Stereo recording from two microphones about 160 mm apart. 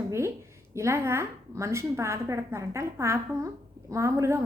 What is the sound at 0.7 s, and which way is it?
A woman's voice, 15° right (ahead or behind).